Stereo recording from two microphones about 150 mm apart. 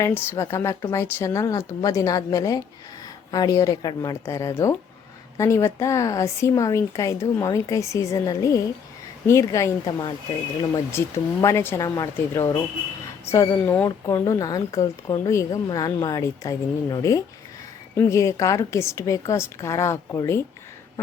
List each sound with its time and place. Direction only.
0.0 s speech: 15° left (ahead or behind)